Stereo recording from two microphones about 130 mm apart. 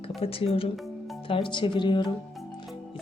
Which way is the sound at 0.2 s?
45° left (ahead or behind).